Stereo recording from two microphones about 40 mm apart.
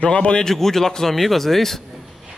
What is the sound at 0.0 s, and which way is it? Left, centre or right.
Speech, left.